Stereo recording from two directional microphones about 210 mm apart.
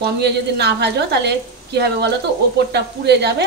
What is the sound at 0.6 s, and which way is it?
A woman's voice, 55° right (ahead or behind).